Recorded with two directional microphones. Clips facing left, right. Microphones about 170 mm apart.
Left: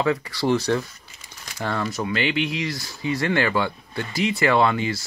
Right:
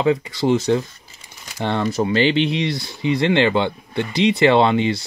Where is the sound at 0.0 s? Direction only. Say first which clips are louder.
Right 4 dB; 25° right (ahead or behind).